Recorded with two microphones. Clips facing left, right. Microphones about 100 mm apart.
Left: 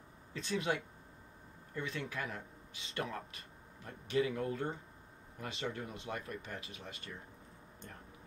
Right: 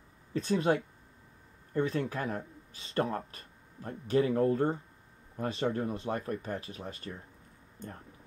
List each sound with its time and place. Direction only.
0.3 s speech: 40° right (ahead or behind)